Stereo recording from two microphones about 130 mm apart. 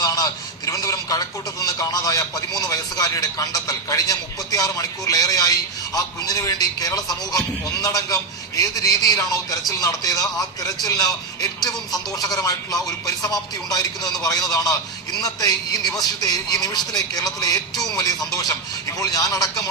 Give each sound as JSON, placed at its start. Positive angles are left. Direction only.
{"t": 0.0, "sound": "a man's voice", "side_deg": 30}